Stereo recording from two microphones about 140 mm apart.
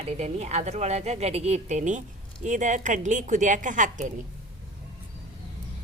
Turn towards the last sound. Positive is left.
turn(degrees=-65)  # may be behind; listen again after turning